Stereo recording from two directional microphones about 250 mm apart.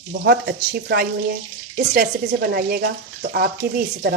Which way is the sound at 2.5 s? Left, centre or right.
Right.